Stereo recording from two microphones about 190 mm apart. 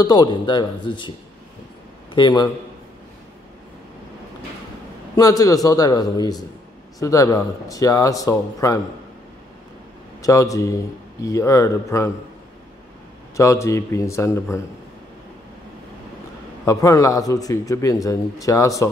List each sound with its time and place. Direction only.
0.0 s a man's voice: 20° left (ahead or behind)
2.1 s a man's voice: 20° left (ahead or behind)
5.1 s a man's voice: 20° left (ahead or behind)
10.2 s a man's voice: 15° left (ahead or behind)
13.4 s a man's voice: 15° left (ahead or behind)
16.6 s a man's voice: 15° left (ahead or behind)